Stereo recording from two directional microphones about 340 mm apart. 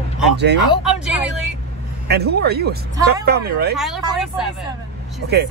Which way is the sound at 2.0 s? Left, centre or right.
Right.